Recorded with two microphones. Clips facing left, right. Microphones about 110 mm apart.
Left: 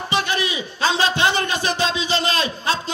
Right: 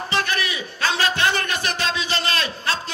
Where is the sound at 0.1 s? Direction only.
20° left (ahead or behind).